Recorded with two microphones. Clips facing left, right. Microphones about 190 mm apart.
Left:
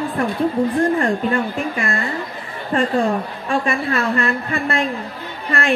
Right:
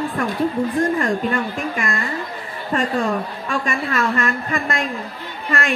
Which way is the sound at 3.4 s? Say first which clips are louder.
Left 3 dB; 35° left (ahead or behind).